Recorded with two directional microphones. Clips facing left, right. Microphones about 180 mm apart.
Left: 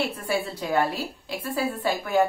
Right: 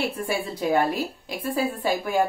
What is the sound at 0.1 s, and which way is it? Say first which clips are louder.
Speech: even; 15° right (ahead or behind).